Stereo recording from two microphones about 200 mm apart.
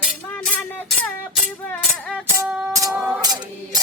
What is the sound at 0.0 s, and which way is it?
Music, 10° left (ahead or behind).